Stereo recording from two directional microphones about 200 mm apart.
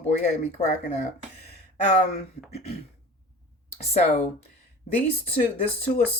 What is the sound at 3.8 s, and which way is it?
Speech, 30° left (ahead or behind).